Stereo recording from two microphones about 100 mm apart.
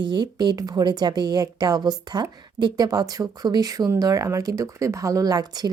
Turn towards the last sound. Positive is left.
turn(degrees=-45)  # may be behind; listen again after turning